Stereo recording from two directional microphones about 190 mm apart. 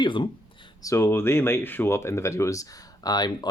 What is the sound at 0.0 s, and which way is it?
Speech, 25° left (ahead or behind).